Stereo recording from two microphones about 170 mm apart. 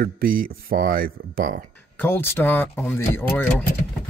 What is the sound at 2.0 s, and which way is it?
Speech, 15° left (ahead or behind).